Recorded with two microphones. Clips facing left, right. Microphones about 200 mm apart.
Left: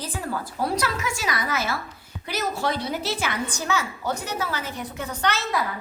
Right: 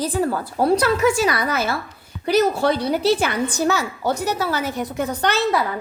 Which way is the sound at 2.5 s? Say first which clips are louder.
Right 7 dB; 65° right (ahead or behind).